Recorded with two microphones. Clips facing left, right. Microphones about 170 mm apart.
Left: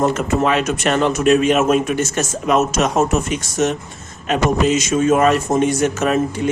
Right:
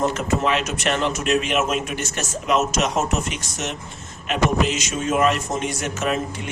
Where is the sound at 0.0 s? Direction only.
50° left (ahead or behind).